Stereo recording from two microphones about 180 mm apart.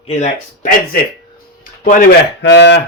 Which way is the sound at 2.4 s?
80° left.